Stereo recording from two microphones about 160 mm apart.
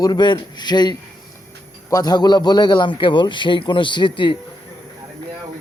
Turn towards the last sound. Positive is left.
turn(degrees=30)  # may be behind; listen again after turning